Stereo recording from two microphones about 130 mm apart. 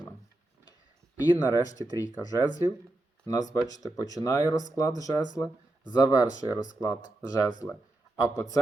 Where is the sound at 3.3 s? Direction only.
30° left (ahead or behind).